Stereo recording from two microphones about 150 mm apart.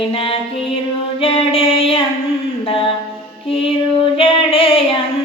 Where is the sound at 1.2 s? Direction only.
40° left (ahead or behind).